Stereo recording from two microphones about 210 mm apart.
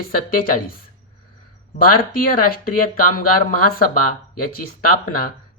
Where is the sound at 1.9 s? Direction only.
45° left (ahead or behind).